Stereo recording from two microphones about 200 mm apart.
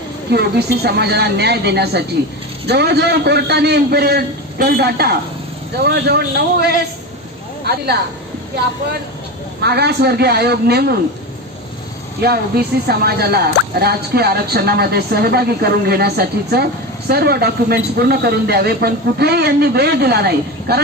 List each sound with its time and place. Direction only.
0.3 s a man's voice: 55° right (ahead or behind)
7.6 s speech: 50° right (ahead or behind)
9.6 s speech: 55° right (ahead or behind)
12.2 s speech: 50° right (ahead or behind)